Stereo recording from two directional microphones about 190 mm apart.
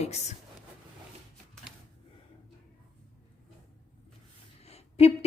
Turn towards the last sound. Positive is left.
turn(degrees=30)  # may be behind; listen again after turning